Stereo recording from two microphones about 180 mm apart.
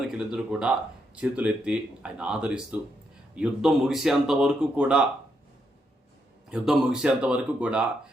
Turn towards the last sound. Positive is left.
turn(degrees=-5)  # may be behind; listen again after turning